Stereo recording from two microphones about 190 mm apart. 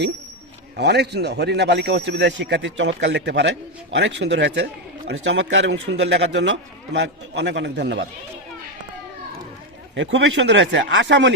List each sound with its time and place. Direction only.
0.8 s a man's voice: 60° right (ahead or behind)
9.9 s a man's voice: 70° right (ahead or behind)